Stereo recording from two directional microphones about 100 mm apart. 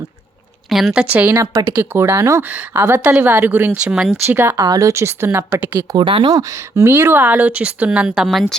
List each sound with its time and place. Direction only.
0.7 s a woman's voice: centre (ahead or behind)
1.0 s speech: 15° right (ahead or behind)
3.9 s a woman's voice: 5° right (ahead or behind)
4.3 s speech: 25° right (ahead or behind)
4.5 s speech: 40° right (ahead or behind); by 5.8 s 20° right (ahead or behind)
6.0 s speech: 60° right (ahead or behind)
6.2 s speech: 35° right (ahead or behind); by 8.5 s centre (ahead or behind)